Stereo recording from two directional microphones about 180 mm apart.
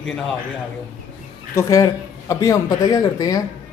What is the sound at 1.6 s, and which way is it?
Speech, 20° left (ahead or behind).